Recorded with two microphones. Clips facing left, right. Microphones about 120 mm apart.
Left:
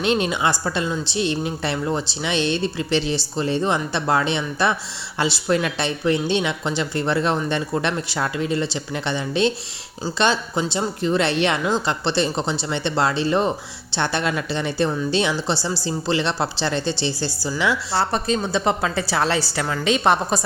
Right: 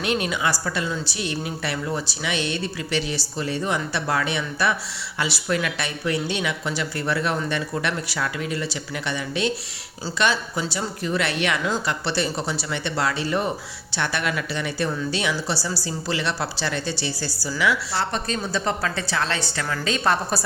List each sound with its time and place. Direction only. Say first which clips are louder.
0.0 s a woman's voice: left 4 dB; 25° left (ahead or behind)